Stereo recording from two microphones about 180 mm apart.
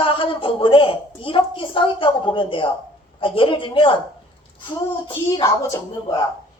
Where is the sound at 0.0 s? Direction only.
30° left (ahead or behind).